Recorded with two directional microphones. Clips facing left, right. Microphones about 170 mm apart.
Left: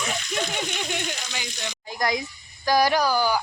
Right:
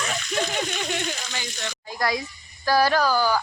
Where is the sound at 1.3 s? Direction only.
15° left (ahead or behind).